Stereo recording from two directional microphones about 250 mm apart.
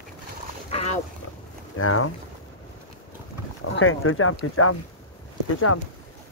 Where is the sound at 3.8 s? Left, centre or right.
Left.